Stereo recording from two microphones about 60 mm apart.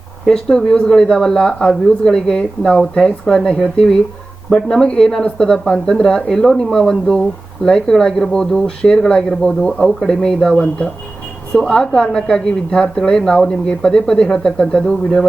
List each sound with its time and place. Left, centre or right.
0.3 s a woman's voice: centre